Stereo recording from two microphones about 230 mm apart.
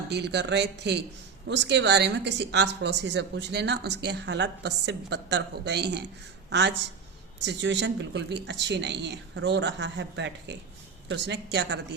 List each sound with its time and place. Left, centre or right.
0.1 s a woman's voice: right